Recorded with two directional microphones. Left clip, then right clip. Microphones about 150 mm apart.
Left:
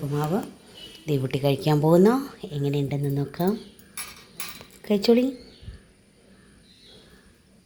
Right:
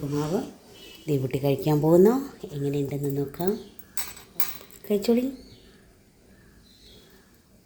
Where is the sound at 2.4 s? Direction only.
20° left (ahead or behind).